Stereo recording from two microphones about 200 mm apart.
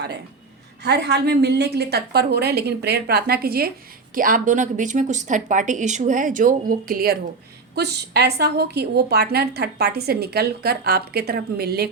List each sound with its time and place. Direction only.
0.8 s a woman's voice: 55° right (ahead or behind)